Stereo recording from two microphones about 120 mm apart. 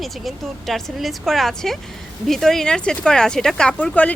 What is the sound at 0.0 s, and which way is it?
Speech, centre (ahead or behind).